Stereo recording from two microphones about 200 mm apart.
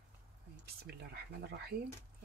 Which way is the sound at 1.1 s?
55° right (ahead or behind).